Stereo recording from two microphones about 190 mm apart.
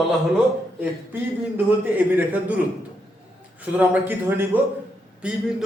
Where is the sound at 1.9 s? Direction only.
10° right (ahead or behind).